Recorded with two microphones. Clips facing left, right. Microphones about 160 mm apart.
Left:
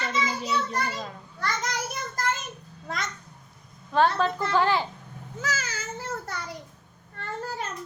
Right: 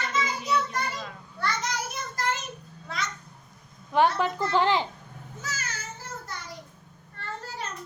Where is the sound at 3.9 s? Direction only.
15° right (ahead or behind).